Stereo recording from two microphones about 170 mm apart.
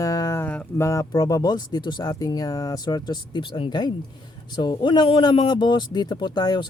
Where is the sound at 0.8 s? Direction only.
20° left (ahead or behind).